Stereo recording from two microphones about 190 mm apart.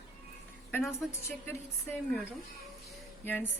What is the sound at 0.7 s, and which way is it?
Speech, 15° left (ahead or behind).